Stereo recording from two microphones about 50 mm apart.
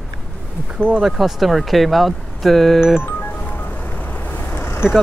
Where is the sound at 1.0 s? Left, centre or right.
Centre.